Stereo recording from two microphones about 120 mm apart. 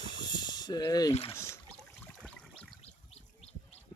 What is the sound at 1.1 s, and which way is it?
Speech, 55° left (ahead or behind).